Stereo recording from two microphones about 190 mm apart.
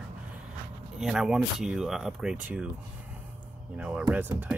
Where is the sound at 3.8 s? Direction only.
5° right (ahead or behind).